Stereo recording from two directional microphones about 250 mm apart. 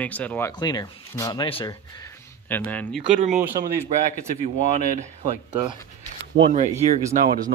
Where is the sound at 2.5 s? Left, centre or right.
Centre.